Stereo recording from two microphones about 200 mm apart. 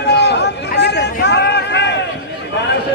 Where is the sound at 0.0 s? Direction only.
60° left (ahead or behind).